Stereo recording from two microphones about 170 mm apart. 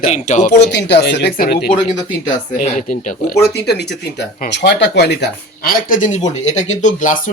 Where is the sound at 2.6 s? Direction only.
45° left (ahead or behind).